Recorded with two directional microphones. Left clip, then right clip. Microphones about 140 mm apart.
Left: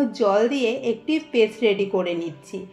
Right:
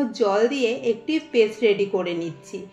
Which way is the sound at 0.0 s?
45° left (ahead or behind).